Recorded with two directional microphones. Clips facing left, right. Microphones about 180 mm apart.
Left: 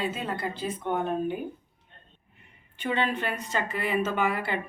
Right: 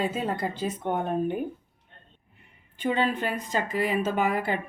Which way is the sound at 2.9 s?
40° right (ahead or behind).